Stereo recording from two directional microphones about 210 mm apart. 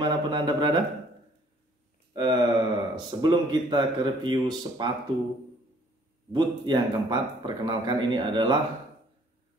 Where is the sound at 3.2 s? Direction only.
20° right (ahead or behind).